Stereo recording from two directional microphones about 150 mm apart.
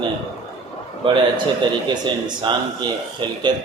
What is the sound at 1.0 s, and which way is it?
Speech, 35° right (ahead or behind).